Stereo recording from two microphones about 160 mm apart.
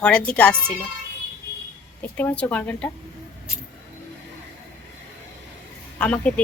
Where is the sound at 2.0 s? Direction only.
10° left (ahead or behind).